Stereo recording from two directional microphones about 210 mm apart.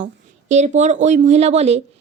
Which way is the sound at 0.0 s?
35° right (ahead or behind).